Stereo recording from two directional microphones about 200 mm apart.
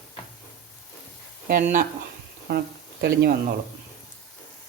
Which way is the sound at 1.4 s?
45° right (ahead or behind).